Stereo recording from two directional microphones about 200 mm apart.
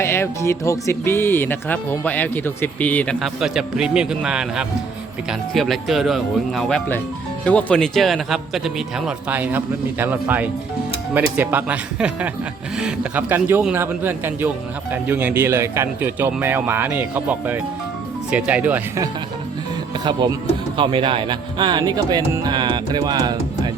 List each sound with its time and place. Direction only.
0.0 s a man's voice: 15° left (ahead or behind); by 19.0 s 10° right (ahead or behind)
20.1 s speech: 20° right (ahead or behind)